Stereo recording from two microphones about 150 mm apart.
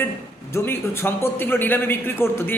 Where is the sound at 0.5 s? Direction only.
15° left (ahead or behind).